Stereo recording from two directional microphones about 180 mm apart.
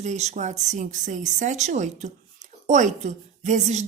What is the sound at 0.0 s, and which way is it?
A woman's voice, 40° right (ahead or behind).